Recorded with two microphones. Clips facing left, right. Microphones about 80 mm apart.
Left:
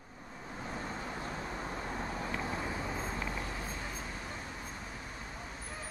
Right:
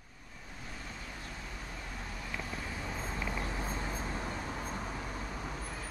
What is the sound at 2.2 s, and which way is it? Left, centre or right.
Vehicle, left.